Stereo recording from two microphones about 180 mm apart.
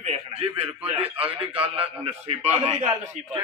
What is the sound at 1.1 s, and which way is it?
A man's voice, 30° right (ahead or behind).